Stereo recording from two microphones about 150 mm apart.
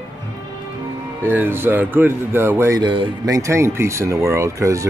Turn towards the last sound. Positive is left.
turn(degrees=-20)  # may be behind; listen again after turning